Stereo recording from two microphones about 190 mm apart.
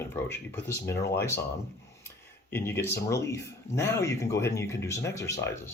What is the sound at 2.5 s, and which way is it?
Speech, 10° left (ahead or behind).